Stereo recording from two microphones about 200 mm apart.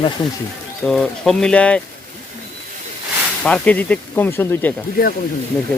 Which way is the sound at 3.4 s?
5° left (ahead or behind).